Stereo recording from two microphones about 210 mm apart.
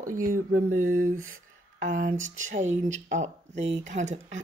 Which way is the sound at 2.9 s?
35° right (ahead or behind).